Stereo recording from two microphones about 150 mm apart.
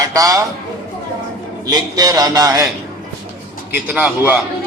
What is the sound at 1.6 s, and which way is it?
Speech, 25° right (ahead or behind).